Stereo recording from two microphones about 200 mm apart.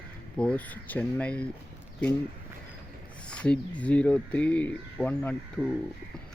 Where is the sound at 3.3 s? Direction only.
5° left (ahead or behind).